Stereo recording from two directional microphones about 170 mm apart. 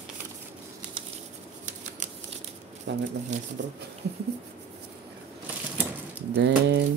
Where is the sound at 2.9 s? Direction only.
90° right.